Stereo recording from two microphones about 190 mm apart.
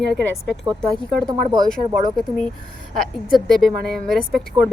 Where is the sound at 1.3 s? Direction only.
25° right (ahead or behind).